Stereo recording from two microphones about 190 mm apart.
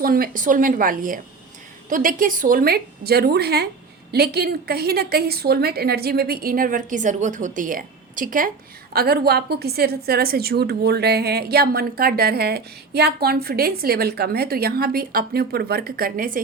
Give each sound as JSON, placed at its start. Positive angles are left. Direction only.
{"t": 0.0, "sound": "a woman's voice", "side_deg": -50}